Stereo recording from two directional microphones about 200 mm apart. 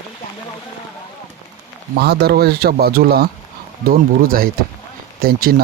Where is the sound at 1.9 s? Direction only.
55° right (ahead or behind).